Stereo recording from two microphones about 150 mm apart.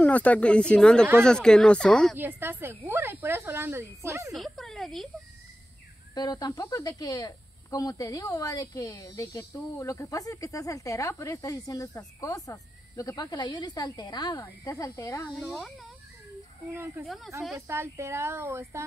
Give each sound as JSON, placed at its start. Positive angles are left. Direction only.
{"t": 0.0, "sound": "speech", "side_deg": 10}
{"t": 2.1, "sound": "speech", "side_deg": -15}
{"t": 4.3, "sound": "speech", "side_deg": 0}
{"t": 6.1, "sound": "speech", "side_deg": 25}
{"t": 15.3, "sound": "speech", "side_deg": 0}
{"t": 16.7, "sound": "speech", "side_deg": -15}
{"t": 17.0, "sound": "speech", "side_deg": 0}
{"t": 17.6, "sound": "speech", "side_deg": -15}